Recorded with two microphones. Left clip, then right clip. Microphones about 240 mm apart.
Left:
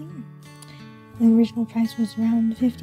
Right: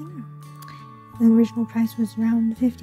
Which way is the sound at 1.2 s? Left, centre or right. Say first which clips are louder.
Right 1 dB; centre.